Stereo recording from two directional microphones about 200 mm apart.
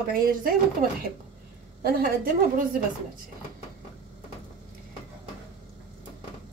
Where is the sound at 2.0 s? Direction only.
45° right (ahead or behind).